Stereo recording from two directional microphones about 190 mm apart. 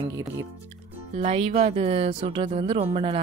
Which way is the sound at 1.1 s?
35° right (ahead or behind).